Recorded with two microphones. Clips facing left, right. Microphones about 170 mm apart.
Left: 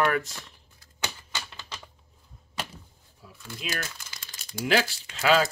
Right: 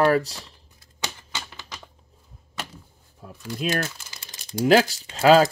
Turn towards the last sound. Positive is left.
turn(degrees=-40)  # may be behind; listen again after turning